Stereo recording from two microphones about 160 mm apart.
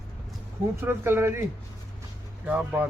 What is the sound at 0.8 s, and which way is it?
Speech, 15° right (ahead or behind).